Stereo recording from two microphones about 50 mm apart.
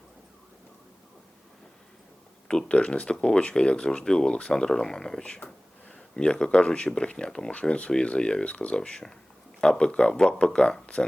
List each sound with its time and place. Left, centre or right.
2.5 s speech: centre